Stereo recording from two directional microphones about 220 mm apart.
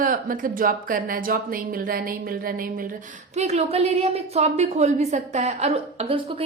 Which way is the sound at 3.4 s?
30° right (ahead or behind).